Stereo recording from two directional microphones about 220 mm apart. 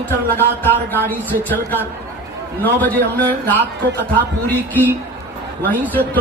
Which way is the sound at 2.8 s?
10° left (ahead or behind).